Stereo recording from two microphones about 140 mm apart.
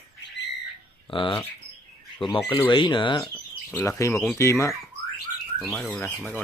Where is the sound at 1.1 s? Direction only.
35° left (ahead or behind).